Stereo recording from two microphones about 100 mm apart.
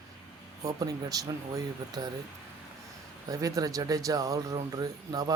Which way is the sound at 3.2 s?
35° right (ahead or behind).